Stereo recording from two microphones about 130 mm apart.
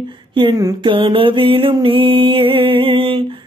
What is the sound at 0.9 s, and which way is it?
Music, 40° right (ahead or behind).